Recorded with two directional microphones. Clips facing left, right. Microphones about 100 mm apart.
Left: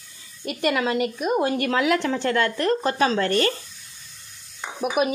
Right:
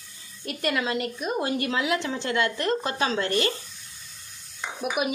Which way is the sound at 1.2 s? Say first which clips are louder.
Left 4 dB; 55° left (ahead or behind).